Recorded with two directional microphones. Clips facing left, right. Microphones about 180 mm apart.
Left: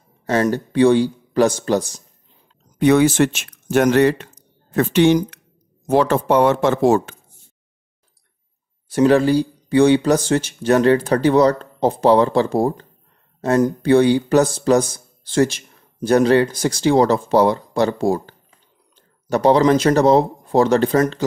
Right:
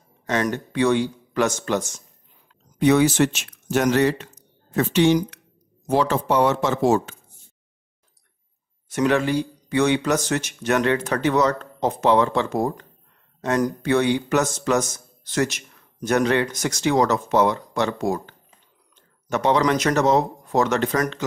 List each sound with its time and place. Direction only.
0.3 s a man's voice: 35° left (ahead or behind)
2.8 s speech: 55° left (ahead or behind)
8.8 s a man's voice: 35° left (ahead or behind)